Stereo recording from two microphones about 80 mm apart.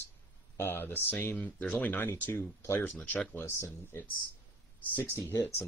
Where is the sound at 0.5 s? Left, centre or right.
Left.